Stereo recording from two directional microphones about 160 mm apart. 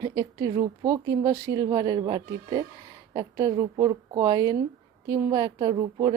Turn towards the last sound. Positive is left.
turn(degrees=-25)  # may be behind; listen again after turning